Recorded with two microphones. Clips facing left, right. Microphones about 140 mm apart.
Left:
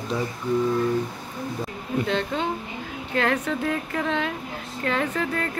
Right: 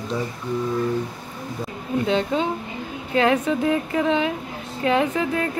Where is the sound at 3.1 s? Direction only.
15° right (ahead or behind).